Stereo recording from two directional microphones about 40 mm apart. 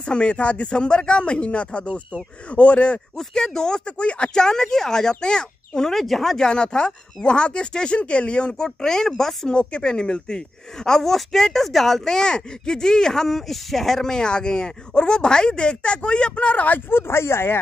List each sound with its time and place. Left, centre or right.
0.0 s a man's voice: left
3.2 s speech: centre
3.8 s speech: left
4.3 s speech: centre
5.9 s speech: centre
6.3 s speech: centre
9.5 s speech: left
16.9 s speech: left